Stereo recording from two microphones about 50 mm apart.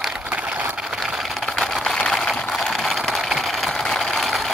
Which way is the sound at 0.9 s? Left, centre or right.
Centre.